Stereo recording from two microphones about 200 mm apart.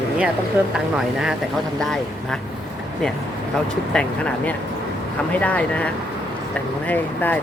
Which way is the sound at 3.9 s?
5° left (ahead or behind).